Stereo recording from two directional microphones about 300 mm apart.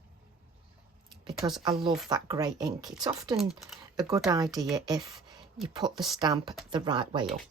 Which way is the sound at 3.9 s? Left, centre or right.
Centre.